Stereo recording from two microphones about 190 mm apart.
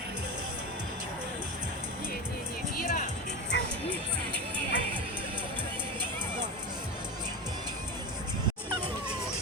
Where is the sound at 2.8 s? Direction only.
40° left (ahead or behind).